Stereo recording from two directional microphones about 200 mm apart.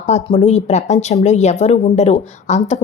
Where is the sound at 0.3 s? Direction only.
35° left (ahead or behind).